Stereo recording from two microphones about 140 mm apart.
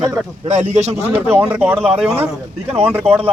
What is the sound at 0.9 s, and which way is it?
Speech, 15° right (ahead or behind).